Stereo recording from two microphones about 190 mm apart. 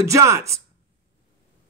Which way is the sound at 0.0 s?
15° right (ahead or behind).